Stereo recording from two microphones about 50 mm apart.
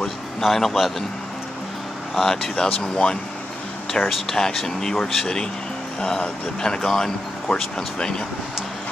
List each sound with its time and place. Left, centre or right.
0.0 s speech: centre
2.1 s speech: centre
2.5 s speech: centre
4.0 s speech: centre
4.4 s speech: centre